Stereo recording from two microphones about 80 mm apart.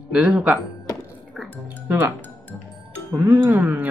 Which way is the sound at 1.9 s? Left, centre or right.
Right.